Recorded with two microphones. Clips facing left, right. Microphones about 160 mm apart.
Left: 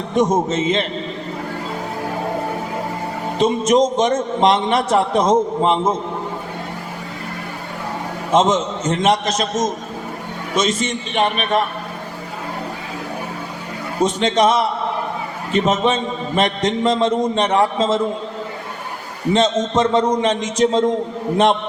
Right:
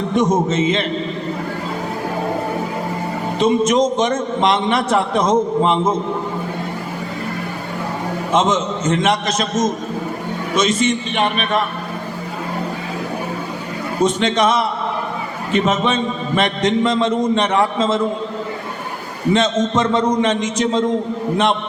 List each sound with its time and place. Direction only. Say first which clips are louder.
0.1 s a man's voice: left 1 dB; 40° left (ahead or behind)
3.3 s a man's voice: even; 40° left (ahead or behind)
8.3 s a man's voice: left 2 dB; 40° left (ahead or behind)
14.0 s a man's voice: even; 40° left (ahead or behind)
19.3 s a man's voice: even; 35° left (ahead or behind)